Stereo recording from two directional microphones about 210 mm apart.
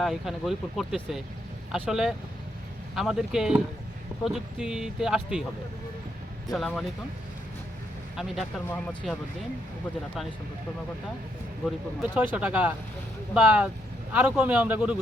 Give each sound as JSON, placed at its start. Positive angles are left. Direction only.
{"t": 0.0, "sound": "speech", "side_deg": 0}
{"t": 6.5, "sound": "speech", "side_deg": 0}
{"t": 8.1, "sound": "speech", "side_deg": 0}
{"t": 11.6, "sound": "a man's voice", "side_deg": -5}